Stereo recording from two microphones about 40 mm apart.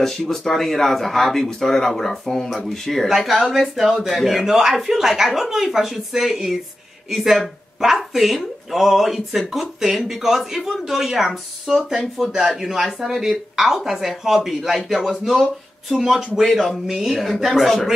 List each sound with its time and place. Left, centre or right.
0.0 s speech: centre
15.9 s speech: centre